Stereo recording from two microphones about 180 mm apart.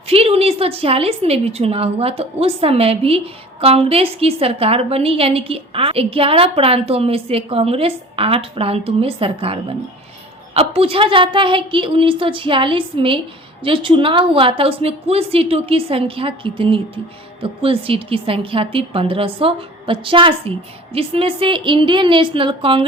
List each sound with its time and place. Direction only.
0.1 s a woman's voice: 35° right (ahead or behind)